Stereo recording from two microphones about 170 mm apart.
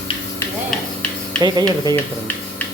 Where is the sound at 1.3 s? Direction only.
25° right (ahead or behind).